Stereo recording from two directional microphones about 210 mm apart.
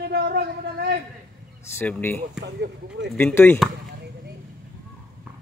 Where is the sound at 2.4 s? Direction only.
55° right (ahead or behind).